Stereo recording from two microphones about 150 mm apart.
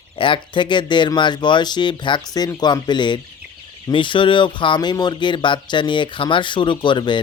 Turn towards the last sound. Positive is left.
turn(degrees=30)  # may be behind; listen again after turning